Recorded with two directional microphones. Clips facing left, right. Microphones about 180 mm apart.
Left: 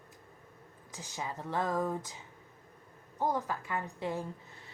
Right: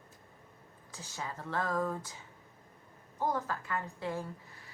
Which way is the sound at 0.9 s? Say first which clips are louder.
Left 2 dB; 15° left (ahead or behind).